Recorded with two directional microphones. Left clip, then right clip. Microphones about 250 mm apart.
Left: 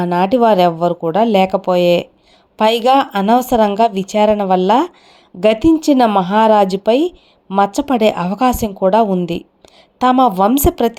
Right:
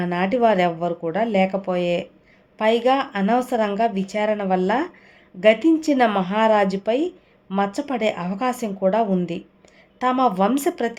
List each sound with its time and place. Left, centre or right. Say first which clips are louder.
0.0 s a woman's voice: left 7 dB; centre